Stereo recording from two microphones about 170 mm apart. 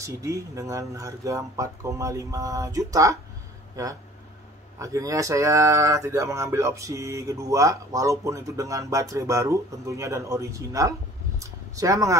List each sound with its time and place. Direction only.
0.0 s speech: 20° right (ahead or behind)
4.7 s speech: 20° right (ahead or behind)